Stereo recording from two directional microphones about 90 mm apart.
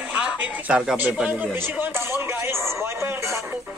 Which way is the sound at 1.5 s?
25° right (ahead or behind).